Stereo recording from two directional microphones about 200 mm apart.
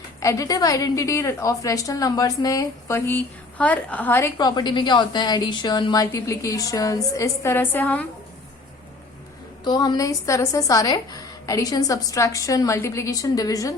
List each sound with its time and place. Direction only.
0.2 s a woman's voice: 15° left (ahead or behind)
9.6 s a woman's voice: 20° left (ahead or behind)